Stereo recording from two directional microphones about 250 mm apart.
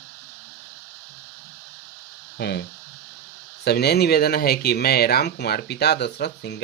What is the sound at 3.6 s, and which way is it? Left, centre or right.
Speech, left.